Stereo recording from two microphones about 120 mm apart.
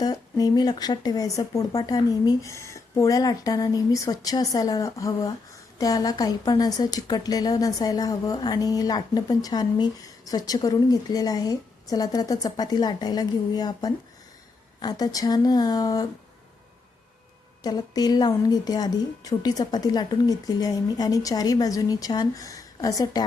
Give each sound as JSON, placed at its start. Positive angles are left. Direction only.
{"t": 0.0, "sound": "a woman's voice", "side_deg": 30}
{"t": 17.6, "sound": "a woman's voice", "side_deg": 35}